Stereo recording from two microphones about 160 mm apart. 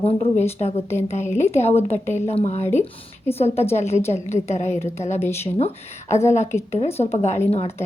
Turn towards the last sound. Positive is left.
turn(degrees=40)  # may be behind; listen again after turning